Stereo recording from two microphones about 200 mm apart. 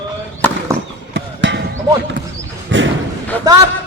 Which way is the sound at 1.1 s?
65° right (ahead or behind).